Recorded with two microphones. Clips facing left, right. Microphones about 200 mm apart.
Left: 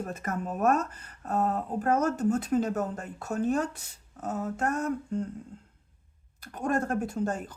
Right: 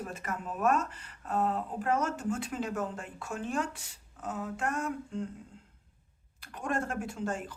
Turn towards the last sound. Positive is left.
turn(degrees=40)  # may be behind; listen again after turning